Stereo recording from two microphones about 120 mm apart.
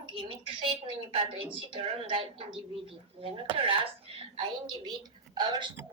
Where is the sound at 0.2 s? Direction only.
50° right (ahead or behind).